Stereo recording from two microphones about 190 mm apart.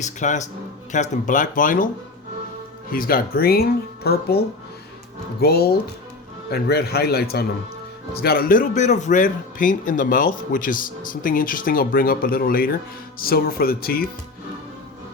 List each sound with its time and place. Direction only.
0.0 s a man's voice: 40° left (ahead or behind)
2.9 s a man's voice: 50° left (ahead or behind)